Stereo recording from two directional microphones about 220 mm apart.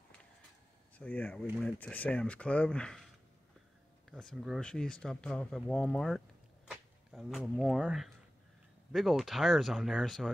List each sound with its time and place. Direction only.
0.9 s speech: 5° left (ahead or behind)
4.1 s speech: centre (ahead or behind)